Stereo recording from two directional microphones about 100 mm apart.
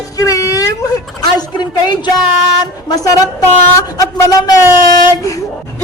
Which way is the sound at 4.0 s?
40° left (ahead or behind).